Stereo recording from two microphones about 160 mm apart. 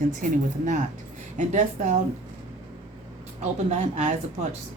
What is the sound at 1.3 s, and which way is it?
Speech, 50° right (ahead or behind).